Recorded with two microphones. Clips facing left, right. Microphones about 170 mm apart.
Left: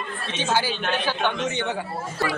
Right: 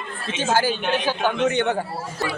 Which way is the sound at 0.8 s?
15° right (ahead or behind).